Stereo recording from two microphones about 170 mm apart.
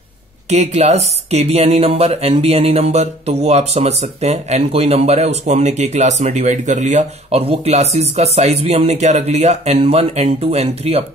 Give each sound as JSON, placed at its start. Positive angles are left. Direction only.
{"t": 0.5, "sound": "speech", "side_deg": -40}